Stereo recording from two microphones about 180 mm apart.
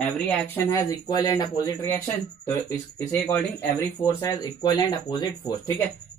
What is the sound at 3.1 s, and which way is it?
Speech, 10° left (ahead or behind).